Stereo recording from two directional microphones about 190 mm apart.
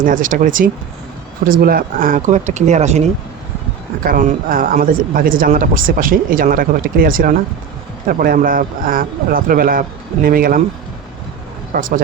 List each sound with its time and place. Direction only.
0.0 s speech: 45° right (ahead or behind)
4.0 s speech: 45° right (ahead or behind)
11.7 s speech: 45° right (ahead or behind)